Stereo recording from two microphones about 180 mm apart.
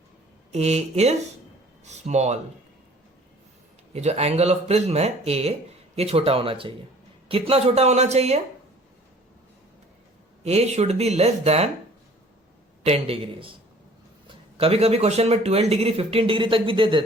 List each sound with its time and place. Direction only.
0.5 s a man's voice: 35° right (ahead or behind)
3.9 s a man's voice: 35° right (ahead or behind)
10.4 s a man's voice: 35° right (ahead or behind)
12.8 s a man's voice: 35° right (ahead or behind)